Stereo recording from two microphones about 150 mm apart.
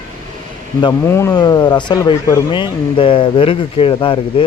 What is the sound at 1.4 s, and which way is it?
A man's voice, 30° left (ahead or behind).